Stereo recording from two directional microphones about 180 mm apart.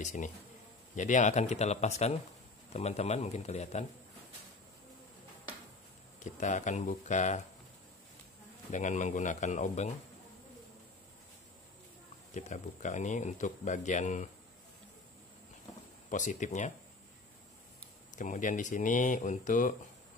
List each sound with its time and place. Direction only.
0.0 s speech: 40° left (ahead or behind)
6.1 s speech: 45° left (ahead or behind)
8.7 s speech: 40° left (ahead or behind)
12.4 s speech: 40° left (ahead or behind)
16.1 s speech: 45° left (ahead or behind)
18.1 s speech: 45° left (ahead or behind)